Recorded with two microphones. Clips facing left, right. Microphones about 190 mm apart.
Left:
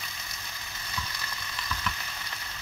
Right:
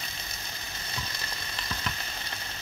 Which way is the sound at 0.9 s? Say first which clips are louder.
Left 1 dB; 25° right (ahead or behind).